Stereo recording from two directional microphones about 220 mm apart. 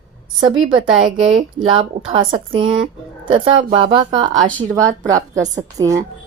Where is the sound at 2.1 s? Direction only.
25° right (ahead or behind).